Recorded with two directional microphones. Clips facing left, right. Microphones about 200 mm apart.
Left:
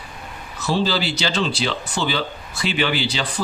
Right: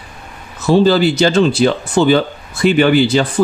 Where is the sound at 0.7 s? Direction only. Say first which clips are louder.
Right 11 dB; 50° right (ahead or behind).